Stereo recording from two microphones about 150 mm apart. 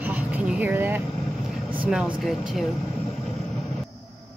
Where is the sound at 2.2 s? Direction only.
Centre (ahead or behind).